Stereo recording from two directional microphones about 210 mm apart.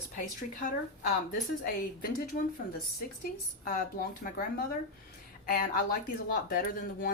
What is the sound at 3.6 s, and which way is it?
Speech, 40° left (ahead or behind).